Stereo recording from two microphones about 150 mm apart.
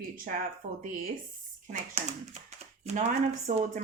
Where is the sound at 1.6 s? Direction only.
50° right (ahead or behind).